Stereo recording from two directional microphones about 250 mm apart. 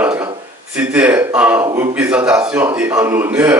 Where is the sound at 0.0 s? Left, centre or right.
Centre.